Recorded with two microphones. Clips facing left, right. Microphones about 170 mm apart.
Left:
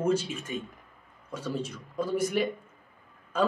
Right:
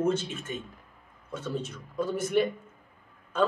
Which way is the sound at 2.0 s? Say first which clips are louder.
Left 2 dB; 30° left (ahead or behind).